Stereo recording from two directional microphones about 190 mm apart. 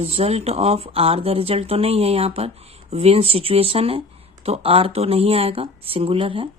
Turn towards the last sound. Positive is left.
turn(degrees=-30)  # may be behind; listen again after turning